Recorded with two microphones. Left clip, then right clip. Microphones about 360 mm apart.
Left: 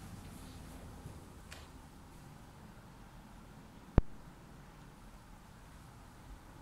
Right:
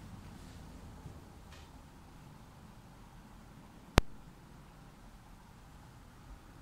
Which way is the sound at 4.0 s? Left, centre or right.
Right.